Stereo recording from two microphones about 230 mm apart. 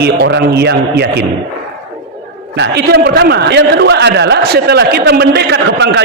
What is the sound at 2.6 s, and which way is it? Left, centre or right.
A man's voice, right.